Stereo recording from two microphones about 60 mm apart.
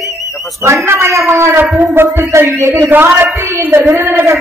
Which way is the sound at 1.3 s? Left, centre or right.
Right.